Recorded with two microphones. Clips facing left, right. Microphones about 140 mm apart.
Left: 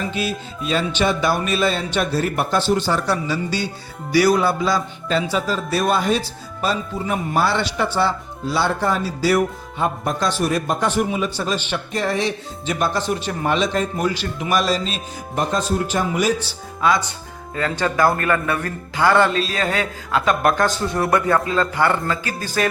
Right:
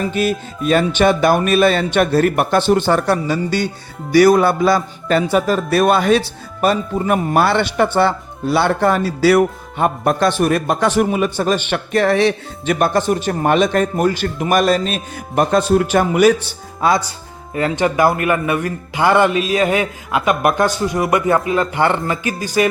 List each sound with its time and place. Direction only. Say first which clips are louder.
0.1 s a man's voice: right 6 dB; 50° right (ahead or behind)
16.8 s speech: right 3 dB; 35° right (ahead or behind)
17.5 s a man's voice: right 5 dB; 20° right (ahead or behind)